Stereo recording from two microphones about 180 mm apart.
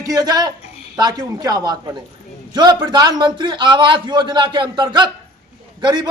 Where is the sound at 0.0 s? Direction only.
20° right (ahead or behind).